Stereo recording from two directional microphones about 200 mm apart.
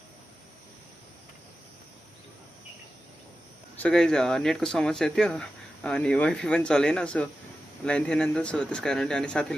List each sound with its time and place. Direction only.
3.8 s speech: 5° left (ahead or behind)